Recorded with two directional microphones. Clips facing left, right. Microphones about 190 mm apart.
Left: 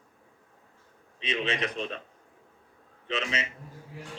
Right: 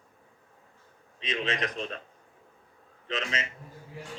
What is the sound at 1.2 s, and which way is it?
Speech, 5° left (ahead or behind).